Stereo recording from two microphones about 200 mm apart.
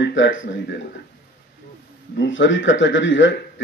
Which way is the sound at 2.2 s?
65° left (ahead or behind).